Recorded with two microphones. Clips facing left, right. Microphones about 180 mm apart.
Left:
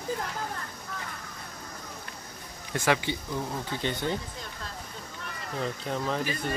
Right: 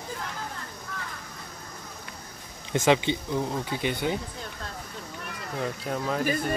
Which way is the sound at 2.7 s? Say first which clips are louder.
Right 5 dB; 20° right (ahead or behind).